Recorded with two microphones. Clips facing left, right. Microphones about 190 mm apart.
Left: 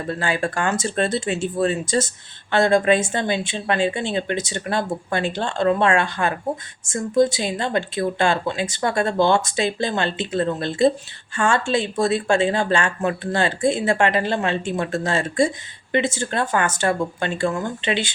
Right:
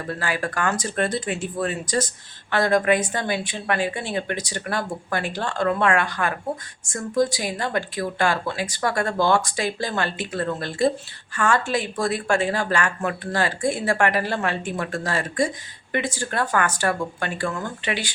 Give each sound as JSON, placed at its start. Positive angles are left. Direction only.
{"t": 0.1, "sound": "speech", "side_deg": 25}